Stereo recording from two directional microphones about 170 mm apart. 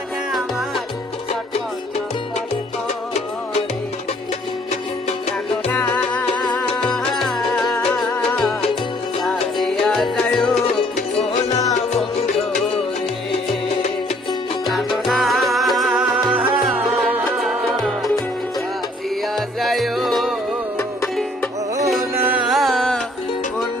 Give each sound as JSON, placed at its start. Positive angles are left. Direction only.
{"t": 5.6, "sound": "music", "side_deg": 10}
{"t": 10.8, "sound": "music", "side_deg": 40}
{"t": 14.7, "sound": "music", "side_deg": 0}
{"t": 19.4, "sound": "music", "side_deg": 0}
{"t": 22.1, "sound": "music", "side_deg": -10}